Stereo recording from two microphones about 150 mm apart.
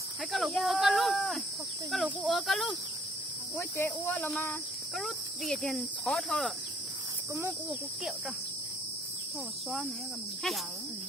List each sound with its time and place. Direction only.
0.3 s cricket: centre (ahead or behind)
3.6 s speech: 15° left (ahead or behind)
4.9 s cricket: centre (ahead or behind)
7.3 s cricket: 15° right (ahead or behind)